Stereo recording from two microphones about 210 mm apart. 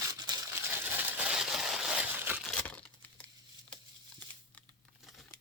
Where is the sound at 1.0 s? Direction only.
5° right (ahead or behind).